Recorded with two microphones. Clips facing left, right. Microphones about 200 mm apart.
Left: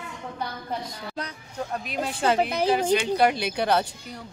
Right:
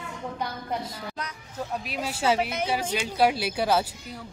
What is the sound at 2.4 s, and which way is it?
Speech, 35° left (ahead or behind).